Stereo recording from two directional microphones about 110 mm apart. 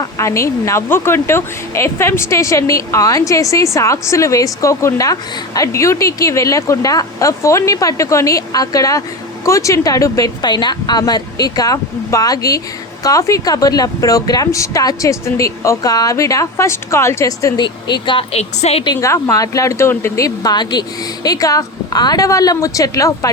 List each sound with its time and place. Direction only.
0.0 s a woman's voice: 25° left (ahead or behind)
17.6 s speech: 45° left (ahead or behind); by 18.9 s 70° left (ahead or behind)
18.9 s a woman's voice: 25° left (ahead or behind)